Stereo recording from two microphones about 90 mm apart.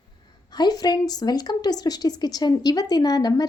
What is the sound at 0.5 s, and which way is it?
A woman's voice, 50° left (ahead or behind).